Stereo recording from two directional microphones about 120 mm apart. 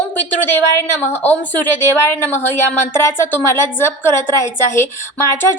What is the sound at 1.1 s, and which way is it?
A woman's voice, 15° left (ahead or behind).